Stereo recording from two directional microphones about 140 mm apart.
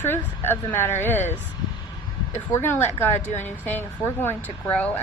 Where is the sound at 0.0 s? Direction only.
15° left (ahead or behind).